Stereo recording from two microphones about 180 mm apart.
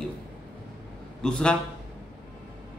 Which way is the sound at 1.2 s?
5° left (ahead or behind).